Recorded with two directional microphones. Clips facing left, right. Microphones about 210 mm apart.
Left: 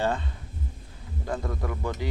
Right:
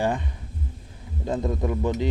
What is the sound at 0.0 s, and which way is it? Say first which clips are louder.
Speech: right 2 dB; 15° right (ahead or behind).